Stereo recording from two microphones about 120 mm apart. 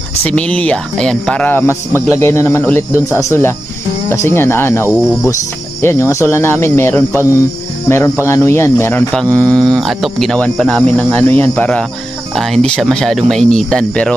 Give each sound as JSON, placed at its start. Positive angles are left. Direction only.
{"t": 0.2, "sound": "speech", "side_deg": 10}
{"t": 9.1, "sound": "speech", "side_deg": 10}
{"t": 9.6, "sound": "speech", "side_deg": 0}